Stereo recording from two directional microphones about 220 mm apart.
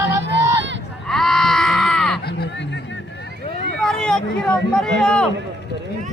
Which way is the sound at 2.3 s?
50° left (ahead or behind).